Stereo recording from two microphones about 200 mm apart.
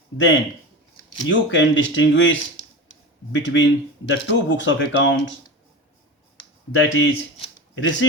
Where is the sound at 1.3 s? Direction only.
65° left (ahead or behind).